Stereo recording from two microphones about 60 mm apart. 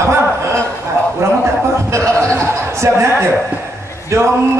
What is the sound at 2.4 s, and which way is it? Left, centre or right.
Speech, right.